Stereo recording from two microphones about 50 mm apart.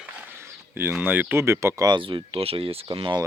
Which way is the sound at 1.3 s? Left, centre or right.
Right.